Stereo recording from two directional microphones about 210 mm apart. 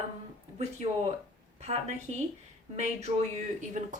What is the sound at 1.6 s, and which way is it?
Speech, 30° right (ahead or behind).